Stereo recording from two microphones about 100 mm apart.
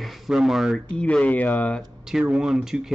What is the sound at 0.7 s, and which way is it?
Speech, 10° left (ahead or behind).